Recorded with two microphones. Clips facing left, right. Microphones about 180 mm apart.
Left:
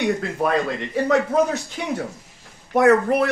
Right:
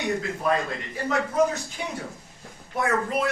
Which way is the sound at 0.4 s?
70° left (ahead or behind).